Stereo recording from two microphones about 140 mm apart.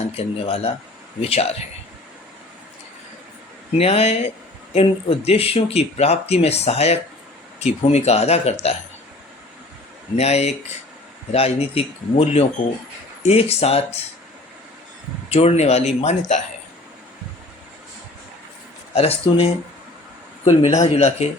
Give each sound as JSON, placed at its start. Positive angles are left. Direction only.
{"t": 0.1, "sound": "speech", "side_deg": 45}
{"t": 3.8, "sound": "speech", "side_deg": 45}
{"t": 10.2, "sound": "speech", "side_deg": 50}
{"t": 15.3, "sound": "speech", "side_deg": 50}
{"t": 18.9, "sound": "speech", "side_deg": 45}